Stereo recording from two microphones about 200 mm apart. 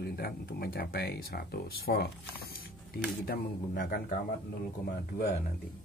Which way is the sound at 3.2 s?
50° left (ahead or behind).